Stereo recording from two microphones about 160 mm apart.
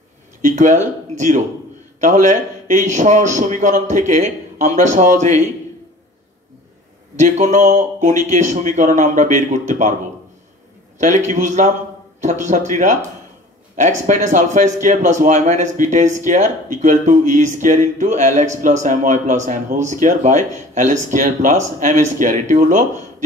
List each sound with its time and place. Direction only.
0.4 s speech: 50° right (ahead or behind)
7.2 s speech: 50° right (ahead or behind)
11.0 s speech: 50° right (ahead or behind)